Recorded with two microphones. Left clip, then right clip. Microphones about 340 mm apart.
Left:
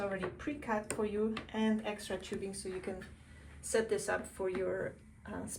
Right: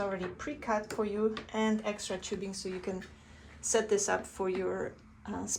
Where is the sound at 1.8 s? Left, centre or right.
Right.